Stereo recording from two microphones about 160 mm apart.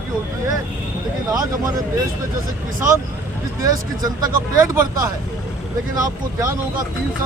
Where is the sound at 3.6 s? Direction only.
25° right (ahead or behind).